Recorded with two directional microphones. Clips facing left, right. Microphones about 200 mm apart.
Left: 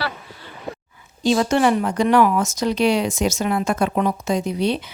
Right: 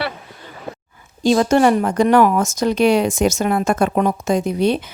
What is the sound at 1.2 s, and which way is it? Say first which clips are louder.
Speech: right 4 dB; 45° right (ahead or behind).